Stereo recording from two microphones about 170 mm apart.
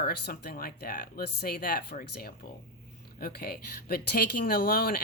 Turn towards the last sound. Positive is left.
turn(degrees=60)  # may be behind; listen again after turning